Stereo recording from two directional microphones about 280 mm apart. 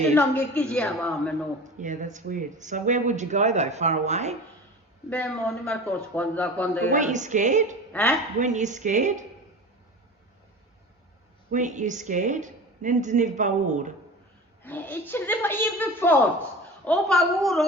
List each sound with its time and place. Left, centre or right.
0.1 s speech: centre
1.6 s speech: right
5.0 s speech: centre
6.9 s speech: right
11.5 s speech: right
14.6 s a woman's voice: centre